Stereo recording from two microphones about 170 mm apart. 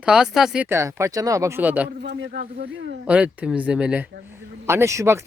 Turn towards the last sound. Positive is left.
turn(degrees=-15)  # may be behind; listen again after turning